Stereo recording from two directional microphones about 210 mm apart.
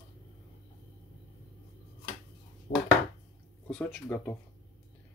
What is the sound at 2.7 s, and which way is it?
Chopping, 40° left (ahead or behind).